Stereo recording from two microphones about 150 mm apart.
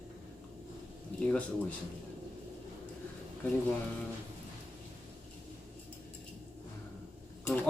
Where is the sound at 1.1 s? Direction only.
5° left (ahead or behind).